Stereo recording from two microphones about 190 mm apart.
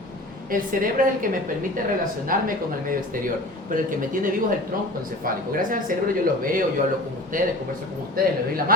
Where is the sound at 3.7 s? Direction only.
45° right (ahead or behind).